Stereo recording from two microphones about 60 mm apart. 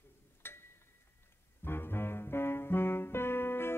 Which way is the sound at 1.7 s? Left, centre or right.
Left.